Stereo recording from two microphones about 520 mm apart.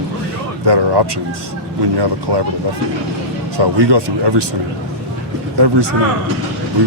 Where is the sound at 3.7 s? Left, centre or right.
Right.